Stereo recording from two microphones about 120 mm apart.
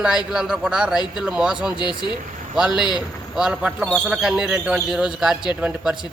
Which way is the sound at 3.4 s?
10° right (ahead or behind).